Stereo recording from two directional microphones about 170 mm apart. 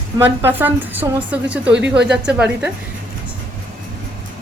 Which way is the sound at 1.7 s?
90° right.